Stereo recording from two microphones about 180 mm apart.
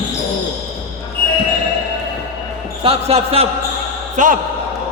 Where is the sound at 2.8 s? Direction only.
35° right (ahead or behind).